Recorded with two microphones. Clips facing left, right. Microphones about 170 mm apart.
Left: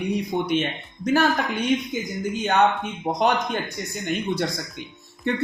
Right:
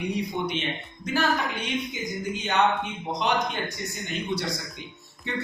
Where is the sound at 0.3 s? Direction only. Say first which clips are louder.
Left 5 dB; 50° left (ahead or behind).